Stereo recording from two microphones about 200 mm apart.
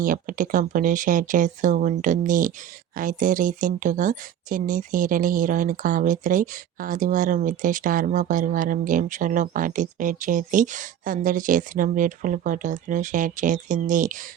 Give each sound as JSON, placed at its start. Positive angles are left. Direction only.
{"t": 0.0, "sound": "speech", "side_deg": -40}